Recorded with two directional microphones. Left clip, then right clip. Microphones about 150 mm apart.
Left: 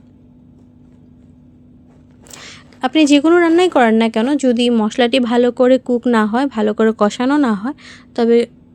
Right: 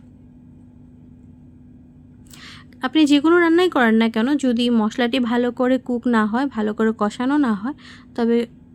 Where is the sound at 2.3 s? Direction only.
20° left (ahead or behind).